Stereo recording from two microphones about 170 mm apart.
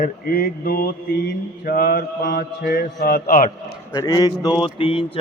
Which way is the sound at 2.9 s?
60° left (ahead or behind).